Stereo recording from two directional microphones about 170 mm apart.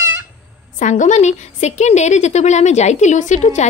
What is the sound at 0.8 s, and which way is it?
A woman's voice, 45° left (ahead or behind).